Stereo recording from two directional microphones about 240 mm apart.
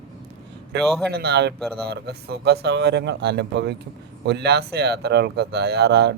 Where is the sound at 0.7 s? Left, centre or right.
Right.